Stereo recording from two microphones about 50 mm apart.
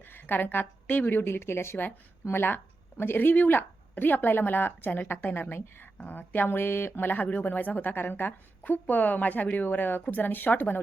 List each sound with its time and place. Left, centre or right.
0.0 s a woman's voice: left
1.2 s speech: left
2.3 s a woman's voice: left
6.1 s speech: left